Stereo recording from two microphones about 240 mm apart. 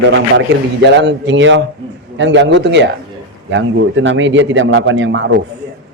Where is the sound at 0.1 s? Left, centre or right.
Right.